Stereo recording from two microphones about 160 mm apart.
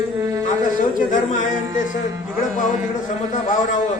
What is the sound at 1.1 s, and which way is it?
Music, 50° left (ahead or behind).